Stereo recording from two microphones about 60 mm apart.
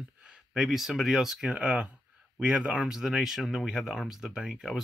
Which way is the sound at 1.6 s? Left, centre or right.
Right.